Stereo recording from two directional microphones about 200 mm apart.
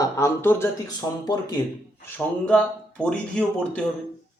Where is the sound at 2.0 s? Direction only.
10° left (ahead or behind).